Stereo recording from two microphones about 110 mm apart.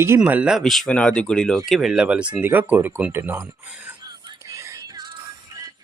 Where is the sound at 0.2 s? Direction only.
10° right (ahead or behind).